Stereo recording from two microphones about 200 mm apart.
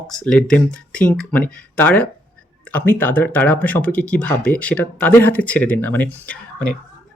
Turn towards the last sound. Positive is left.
turn(degrees=5)  # may be behind; listen again after turning